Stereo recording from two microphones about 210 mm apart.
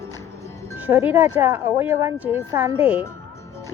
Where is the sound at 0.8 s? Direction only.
10° right (ahead or behind).